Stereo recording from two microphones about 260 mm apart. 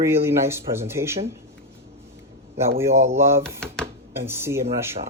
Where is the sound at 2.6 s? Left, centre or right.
Centre.